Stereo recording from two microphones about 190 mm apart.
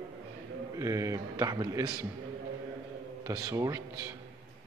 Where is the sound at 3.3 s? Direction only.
20° right (ahead or behind).